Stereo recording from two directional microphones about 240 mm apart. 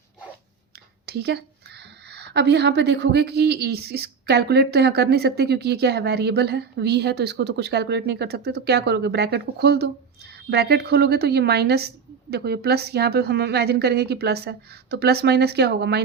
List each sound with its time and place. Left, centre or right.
1.0 s a woman's voice: right